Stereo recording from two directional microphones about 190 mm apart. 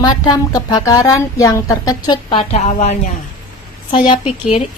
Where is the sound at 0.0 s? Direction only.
20° left (ahead or behind).